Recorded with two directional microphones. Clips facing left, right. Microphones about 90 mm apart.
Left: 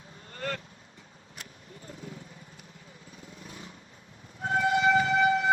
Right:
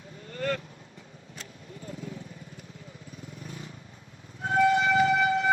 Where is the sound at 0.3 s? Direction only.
35° left (ahead or behind).